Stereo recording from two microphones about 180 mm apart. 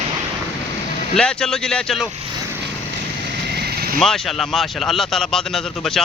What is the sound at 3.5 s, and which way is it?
Vehicle, 60° right (ahead or behind).